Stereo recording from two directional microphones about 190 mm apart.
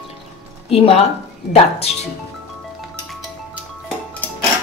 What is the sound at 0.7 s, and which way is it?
Speech, 30° left (ahead or behind).